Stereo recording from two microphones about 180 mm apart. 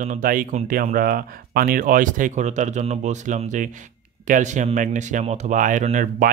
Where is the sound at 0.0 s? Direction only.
50° right (ahead or behind).